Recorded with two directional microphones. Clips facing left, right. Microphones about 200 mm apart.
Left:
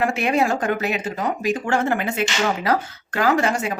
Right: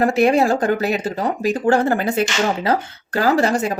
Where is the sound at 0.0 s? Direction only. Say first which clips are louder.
Right 5 dB; 35° right (ahead or behind).